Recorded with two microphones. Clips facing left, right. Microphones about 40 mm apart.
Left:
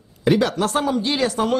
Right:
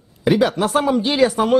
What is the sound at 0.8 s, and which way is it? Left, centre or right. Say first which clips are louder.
Speech: right 3 dB; right.